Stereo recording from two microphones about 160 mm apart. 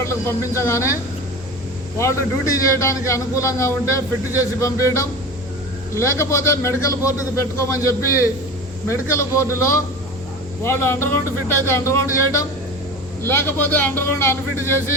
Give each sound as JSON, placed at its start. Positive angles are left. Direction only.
{"t": 0.0, "sound": "speech", "side_deg": 15}
{"t": 2.0, "sound": "a man's voice", "side_deg": 20}